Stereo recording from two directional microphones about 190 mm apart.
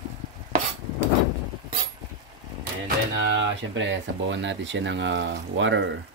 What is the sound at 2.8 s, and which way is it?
Speech, 70° right (ahead or behind).